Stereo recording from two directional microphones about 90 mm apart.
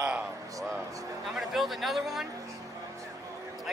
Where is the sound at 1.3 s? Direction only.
Centre (ahead or behind).